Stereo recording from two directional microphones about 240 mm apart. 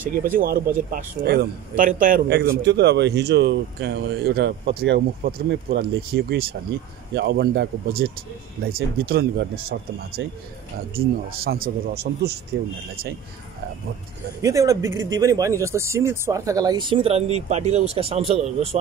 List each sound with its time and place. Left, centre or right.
0.1 s a man's voice: right
14.4 s speech: centre